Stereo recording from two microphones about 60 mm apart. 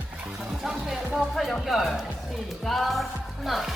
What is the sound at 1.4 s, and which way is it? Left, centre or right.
Speech, centre.